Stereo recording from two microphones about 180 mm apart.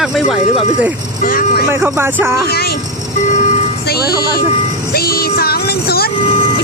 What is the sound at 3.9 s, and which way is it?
Speech, 60° left (ahead or behind).